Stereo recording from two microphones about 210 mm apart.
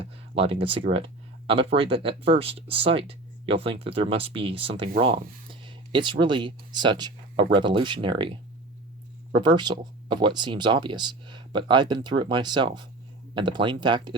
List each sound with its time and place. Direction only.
0.0 s speech: 25° right (ahead or behind)